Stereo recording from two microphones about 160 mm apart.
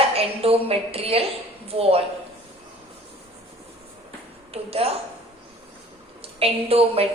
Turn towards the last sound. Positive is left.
turn(degrees=-40)  # may be behind; listen again after turning